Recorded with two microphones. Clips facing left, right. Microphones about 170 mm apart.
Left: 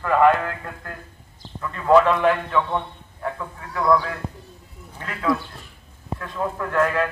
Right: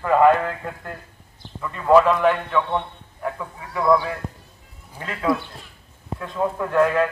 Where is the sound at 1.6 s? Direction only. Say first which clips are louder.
Right 1 dB; 5° right (ahead or behind).